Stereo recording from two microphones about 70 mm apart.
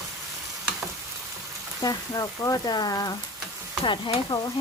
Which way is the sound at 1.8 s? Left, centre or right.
Left.